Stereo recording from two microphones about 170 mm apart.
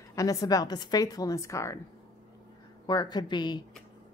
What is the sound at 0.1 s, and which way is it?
Speech, 20° left (ahead or behind).